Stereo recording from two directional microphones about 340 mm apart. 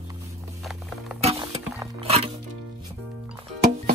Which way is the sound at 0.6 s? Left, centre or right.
Centre.